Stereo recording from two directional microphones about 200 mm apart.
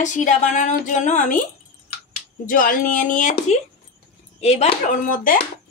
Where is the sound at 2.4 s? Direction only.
45° left (ahead or behind).